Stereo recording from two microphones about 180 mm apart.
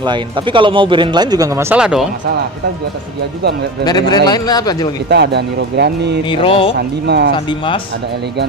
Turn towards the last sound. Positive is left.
turn(degrees=30)  # may be behind; listen again after turning